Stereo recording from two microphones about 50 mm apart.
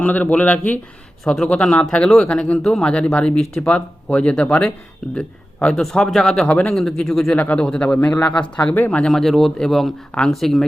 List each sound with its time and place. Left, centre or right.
0.0 s speech: left
1.3 s speech: centre
3.7 s speech: left
5.8 s speech: centre
6.4 s speech: centre
6.9 s speech: centre
7.3 s speech: left
9.0 s speech: centre